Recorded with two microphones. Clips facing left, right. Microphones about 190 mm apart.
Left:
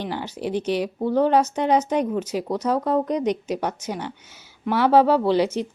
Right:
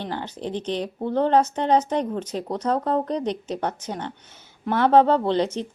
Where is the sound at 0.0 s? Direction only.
10° left (ahead or behind).